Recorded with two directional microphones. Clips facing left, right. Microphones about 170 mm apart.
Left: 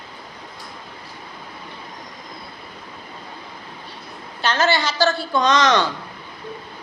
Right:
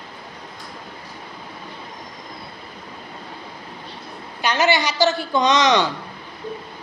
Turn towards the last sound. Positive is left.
turn(degrees=-20)  # may be behind; listen again after turning